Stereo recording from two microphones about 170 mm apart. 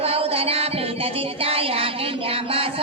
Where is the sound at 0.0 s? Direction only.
35° right (ahead or behind).